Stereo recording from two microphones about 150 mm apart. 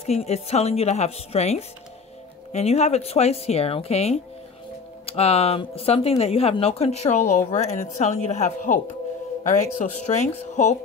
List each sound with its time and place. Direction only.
0.0 s speech: 45° left (ahead or behind)